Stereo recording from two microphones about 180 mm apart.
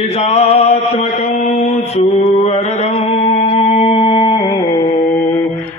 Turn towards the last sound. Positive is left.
turn(degrees=30)  # may be behind; listen again after turning